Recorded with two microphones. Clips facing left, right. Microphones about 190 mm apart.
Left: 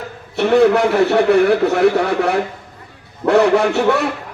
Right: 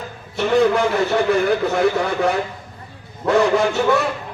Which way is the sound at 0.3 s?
65° left (ahead or behind).